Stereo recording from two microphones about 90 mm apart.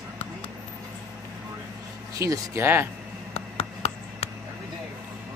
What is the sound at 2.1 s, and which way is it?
Speech, 35° right (ahead or behind).